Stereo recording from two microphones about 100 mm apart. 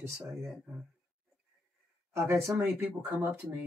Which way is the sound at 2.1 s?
25° right (ahead or behind).